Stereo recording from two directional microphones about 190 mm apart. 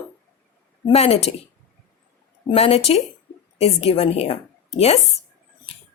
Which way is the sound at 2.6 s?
35° left (ahead or behind).